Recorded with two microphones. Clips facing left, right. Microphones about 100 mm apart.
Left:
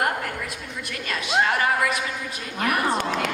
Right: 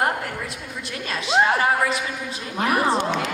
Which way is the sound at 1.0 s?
30° right (ahead or behind).